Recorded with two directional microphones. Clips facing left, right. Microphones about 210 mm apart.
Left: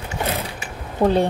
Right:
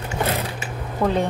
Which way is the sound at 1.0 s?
30° left (ahead or behind).